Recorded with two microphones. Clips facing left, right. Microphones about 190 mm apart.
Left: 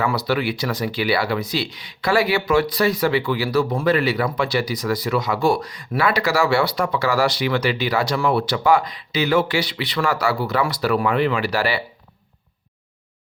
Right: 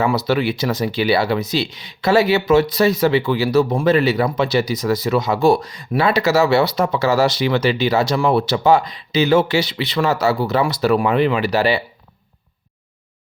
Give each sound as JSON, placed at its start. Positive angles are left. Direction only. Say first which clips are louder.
{"t": 0.0, "sound": "speech", "louder": "right 4 dB", "side_deg": -25}